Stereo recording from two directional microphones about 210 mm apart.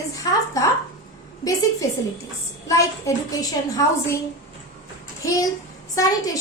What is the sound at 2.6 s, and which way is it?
A child's voice, 15° left (ahead or behind).